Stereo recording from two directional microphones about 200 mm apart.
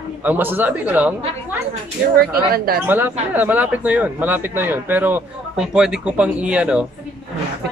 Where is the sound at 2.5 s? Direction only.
50° right (ahead or behind).